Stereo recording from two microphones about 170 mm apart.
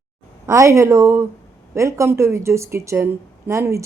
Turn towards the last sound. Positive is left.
turn(degrees=-15)  # may be behind; listen again after turning